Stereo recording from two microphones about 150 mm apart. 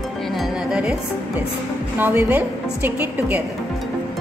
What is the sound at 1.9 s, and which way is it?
A woman's voice, 15° right (ahead or behind).